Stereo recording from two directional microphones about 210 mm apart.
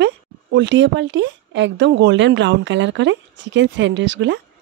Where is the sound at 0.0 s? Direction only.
55° right (ahead or behind).